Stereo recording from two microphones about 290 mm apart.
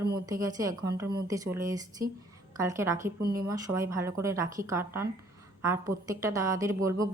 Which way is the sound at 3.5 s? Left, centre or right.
Centre.